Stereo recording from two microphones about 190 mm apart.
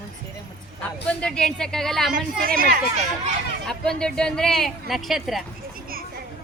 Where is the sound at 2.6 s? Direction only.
50° right (ahead or behind).